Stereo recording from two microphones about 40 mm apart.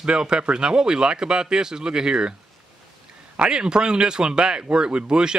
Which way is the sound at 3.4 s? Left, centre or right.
Centre.